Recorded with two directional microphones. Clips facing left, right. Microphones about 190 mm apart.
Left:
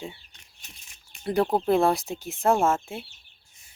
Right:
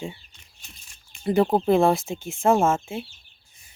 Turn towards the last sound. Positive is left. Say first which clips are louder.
# right 2 dB
turn(degrees=0)  # may be behind; listen again after turning